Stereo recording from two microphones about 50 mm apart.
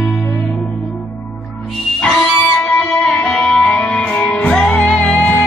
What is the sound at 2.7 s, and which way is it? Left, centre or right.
Music, left.